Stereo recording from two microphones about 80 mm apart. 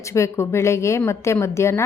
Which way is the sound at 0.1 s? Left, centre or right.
Left.